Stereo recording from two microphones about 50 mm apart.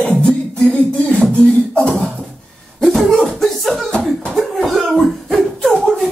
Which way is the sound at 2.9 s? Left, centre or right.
Centre.